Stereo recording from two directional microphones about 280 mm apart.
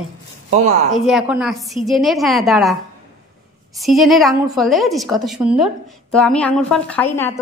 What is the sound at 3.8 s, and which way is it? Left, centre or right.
A woman's voice, centre.